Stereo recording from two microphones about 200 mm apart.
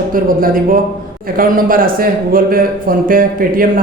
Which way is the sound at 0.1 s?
45° right (ahead or behind).